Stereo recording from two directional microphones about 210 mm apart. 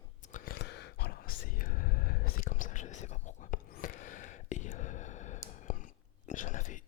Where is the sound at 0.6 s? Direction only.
55° left (ahead or behind).